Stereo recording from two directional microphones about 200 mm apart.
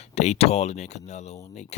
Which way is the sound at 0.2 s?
35° left (ahead or behind).